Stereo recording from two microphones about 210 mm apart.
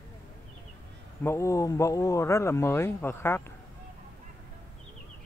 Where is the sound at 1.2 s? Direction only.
15° left (ahead or behind).